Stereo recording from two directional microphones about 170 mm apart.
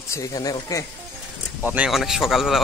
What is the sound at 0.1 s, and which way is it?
Speech, 20° left (ahead or behind).